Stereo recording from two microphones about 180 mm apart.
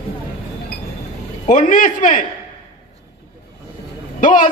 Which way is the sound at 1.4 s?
45° left (ahead or behind).